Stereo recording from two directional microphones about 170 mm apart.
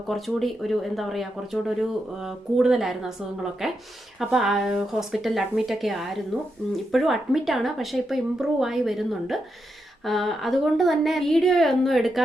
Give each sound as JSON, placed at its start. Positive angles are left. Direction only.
{"t": 0.1, "sound": "speech", "side_deg": 0}